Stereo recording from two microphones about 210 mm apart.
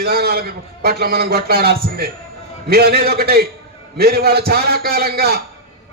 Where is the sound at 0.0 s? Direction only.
50° right (ahead or behind).